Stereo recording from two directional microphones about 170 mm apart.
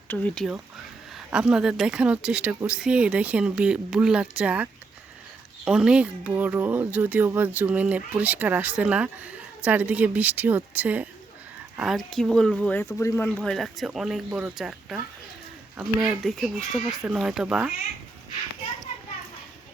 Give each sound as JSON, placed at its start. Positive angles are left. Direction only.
{"t": 0.1, "sound": "speech", "side_deg": 10}
{"t": 1.1, "sound": "speech", "side_deg": -5}
{"t": 13.0, "sound": "speech", "side_deg": 15}
{"t": 13.2, "sound": "speech", "side_deg": 5}